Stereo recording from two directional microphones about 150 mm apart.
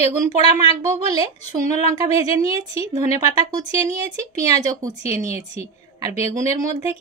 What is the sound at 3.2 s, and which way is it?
A woman's voice, 25° right (ahead or behind).